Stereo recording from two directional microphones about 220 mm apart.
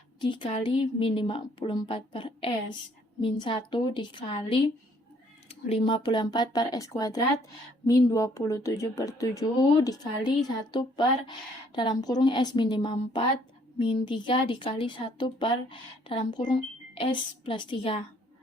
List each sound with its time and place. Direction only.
0.2 s a woman's voice: 20° left (ahead or behind)